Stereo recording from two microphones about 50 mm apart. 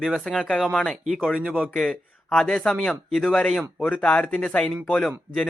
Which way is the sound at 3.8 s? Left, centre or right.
Left.